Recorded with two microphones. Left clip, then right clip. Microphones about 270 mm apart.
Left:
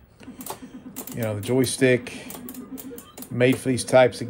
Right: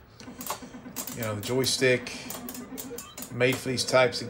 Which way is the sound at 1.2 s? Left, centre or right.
Left.